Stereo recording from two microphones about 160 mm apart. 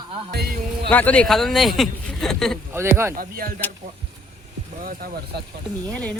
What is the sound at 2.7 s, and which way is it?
Speech, 15° right (ahead or behind).